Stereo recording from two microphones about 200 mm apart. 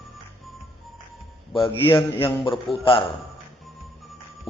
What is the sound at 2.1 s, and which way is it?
Speech, 25° left (ahead or behind).